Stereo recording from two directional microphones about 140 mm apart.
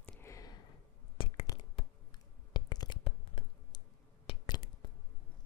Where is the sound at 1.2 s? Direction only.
40° left (ahead or behind).